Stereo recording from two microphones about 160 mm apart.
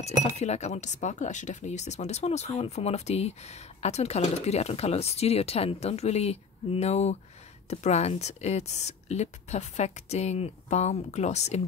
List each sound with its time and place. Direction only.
0.0 s speech: 45° left (ahead or behind)